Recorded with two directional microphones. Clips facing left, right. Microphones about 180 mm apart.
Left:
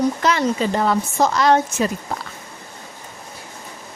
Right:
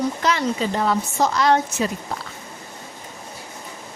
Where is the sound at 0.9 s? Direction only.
55° left (ahead or behind).